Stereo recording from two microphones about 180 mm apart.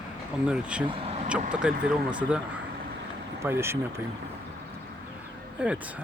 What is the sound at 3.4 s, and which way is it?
Speech, 15° right (ahead or behind).